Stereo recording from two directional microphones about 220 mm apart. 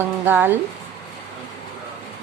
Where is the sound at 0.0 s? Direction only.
10° right (ahead or behind).